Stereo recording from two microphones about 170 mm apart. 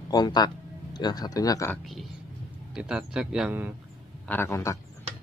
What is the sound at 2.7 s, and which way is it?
A man's voice, 5° right (ahead or behind).